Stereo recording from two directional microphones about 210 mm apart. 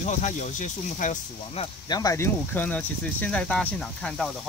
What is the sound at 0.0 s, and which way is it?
Speech, 35° left (ahead or behind).